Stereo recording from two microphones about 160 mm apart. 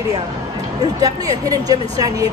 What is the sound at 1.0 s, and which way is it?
Speech, 20° right (ahead or behind).